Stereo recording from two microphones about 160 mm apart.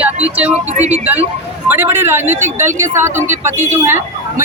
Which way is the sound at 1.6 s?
15° right (ahead or behind).